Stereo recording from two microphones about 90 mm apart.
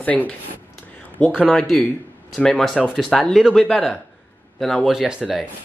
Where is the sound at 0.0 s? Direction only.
15° left (ahead or behind).